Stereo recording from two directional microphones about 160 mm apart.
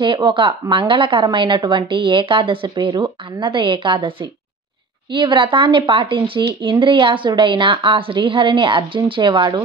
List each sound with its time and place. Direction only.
0.0 s a woman's voice: 30° right (ahead or behind)